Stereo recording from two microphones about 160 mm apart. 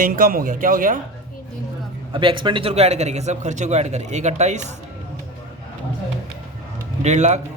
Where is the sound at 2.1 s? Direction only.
30° right (ahead or behind); by 4.6 s 45° right (ahead or behind).